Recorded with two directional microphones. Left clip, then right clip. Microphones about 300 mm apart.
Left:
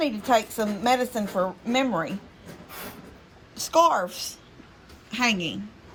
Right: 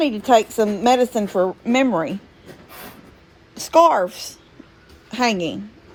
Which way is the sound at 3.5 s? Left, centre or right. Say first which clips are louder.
Right 6 dB; right.